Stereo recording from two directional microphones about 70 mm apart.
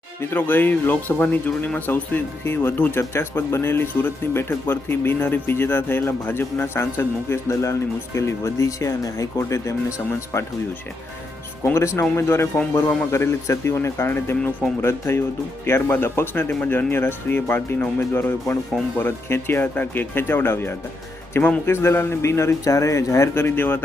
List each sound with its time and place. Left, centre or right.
0.2 s speech: left
11.6 s a man's voice: left
23.4 s speech: left